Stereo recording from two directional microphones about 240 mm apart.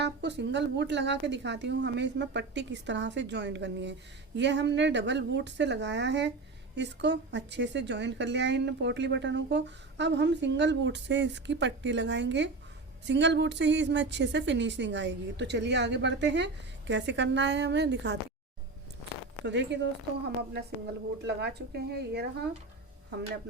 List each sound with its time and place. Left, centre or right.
0.0 s a woman's voice: right
19.5 s a woman's voice: right